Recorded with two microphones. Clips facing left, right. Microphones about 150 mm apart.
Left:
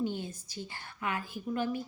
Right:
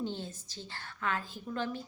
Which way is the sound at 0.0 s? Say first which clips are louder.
Left 3 dB; 10° left (ahead or behind).